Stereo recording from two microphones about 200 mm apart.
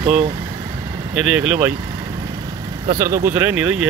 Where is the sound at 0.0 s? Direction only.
30° right (ahead or behind).